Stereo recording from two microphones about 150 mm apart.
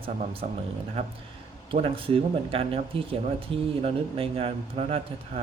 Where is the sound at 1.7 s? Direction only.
35° right (ahead or behind).